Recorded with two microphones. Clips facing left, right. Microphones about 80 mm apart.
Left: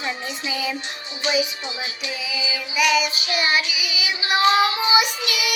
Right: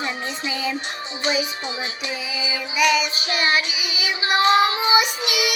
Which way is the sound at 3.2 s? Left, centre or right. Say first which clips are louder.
Right 1 dB; right.